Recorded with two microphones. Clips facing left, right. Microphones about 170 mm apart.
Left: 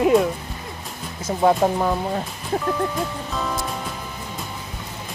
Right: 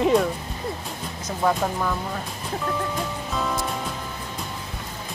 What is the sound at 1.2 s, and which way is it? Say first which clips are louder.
Speech: left 6 dB; 30° left (ahead or behind).